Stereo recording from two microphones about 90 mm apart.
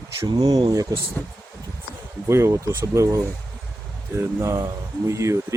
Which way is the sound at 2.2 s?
30° right (ahead or behind).